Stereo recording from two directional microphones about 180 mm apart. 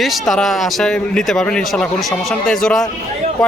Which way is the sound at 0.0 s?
Centre (ahead or behind).